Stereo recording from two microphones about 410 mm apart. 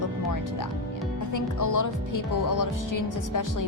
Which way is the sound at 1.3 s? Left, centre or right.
Left.